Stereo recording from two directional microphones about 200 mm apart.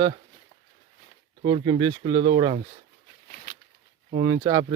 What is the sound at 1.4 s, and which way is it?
Speech, 25° right (ahead or behind).